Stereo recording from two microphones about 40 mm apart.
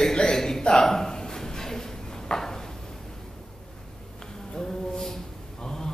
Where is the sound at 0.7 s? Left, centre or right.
Centre.